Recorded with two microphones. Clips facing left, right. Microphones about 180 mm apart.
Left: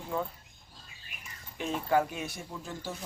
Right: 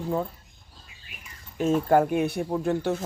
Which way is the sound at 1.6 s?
45° right (ahead or behind).